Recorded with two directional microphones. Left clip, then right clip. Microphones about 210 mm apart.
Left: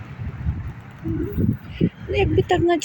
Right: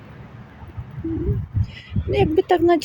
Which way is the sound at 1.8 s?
10° right (ahead or behind).